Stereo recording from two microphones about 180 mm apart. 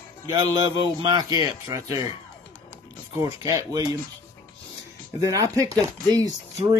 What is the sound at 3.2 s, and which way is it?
Speech, 20° right (ahead or behind).